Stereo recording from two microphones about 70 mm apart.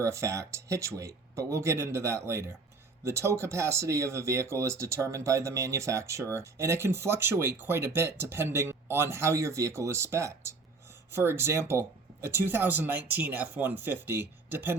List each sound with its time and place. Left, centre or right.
0.0 s speech: right